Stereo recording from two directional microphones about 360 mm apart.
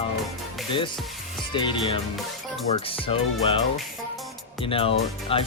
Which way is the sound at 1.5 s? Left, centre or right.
Centre.